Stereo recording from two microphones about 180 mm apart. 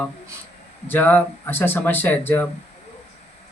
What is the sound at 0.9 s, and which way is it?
Speech, 10° left (ahead or behind).